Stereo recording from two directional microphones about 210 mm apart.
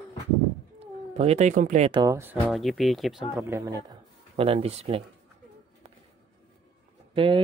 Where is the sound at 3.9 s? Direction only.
25° right (ahead or behind).